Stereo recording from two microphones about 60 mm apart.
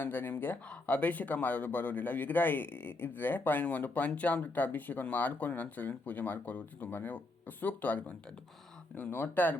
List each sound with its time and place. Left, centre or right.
0.0 s speech: left
0.7 s speech: left